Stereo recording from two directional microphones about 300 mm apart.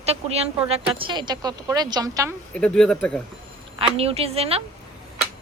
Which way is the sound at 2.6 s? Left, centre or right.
Centre.